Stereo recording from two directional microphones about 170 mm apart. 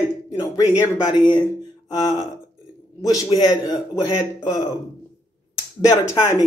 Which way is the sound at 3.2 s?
25° left (ahead or behind).